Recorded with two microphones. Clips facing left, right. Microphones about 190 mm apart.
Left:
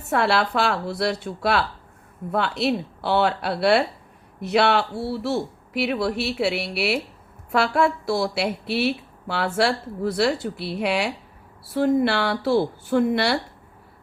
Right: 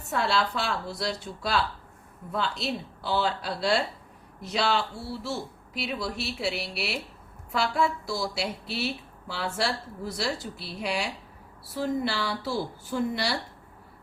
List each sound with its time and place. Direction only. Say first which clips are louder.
0.1 s a woman's voice: left 6 dB; 65° left (ahead or behind)